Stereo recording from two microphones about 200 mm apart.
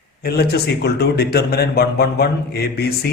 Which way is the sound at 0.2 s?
50° left (ahead or behind).